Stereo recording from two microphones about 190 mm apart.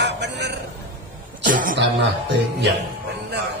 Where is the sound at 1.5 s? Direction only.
45° right (ahead or behind).